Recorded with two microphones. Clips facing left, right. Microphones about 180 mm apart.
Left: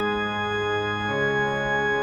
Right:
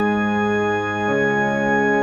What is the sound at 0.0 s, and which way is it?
Music, 45° right (ahead or behind).